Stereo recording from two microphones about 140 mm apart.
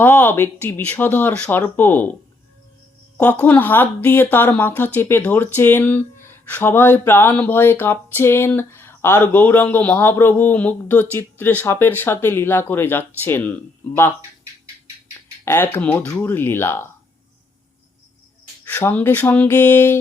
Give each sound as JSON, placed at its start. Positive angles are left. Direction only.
{"t": 0.0, "sound": "speech", "side_deg": 15}
{"t": 3.2, "sound": "speech", "side_deg": 10}
{"t": 15.4, "sound": "speech", "side_deg": 15}
{"t": 18.6, "sound": "speech", "side_deg": 15}